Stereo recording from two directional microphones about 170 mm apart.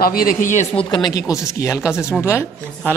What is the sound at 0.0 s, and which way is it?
Speech, 60° left (ahead or behind).